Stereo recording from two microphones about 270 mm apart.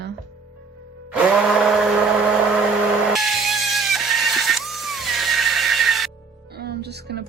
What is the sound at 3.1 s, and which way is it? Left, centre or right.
Vehicle, centre.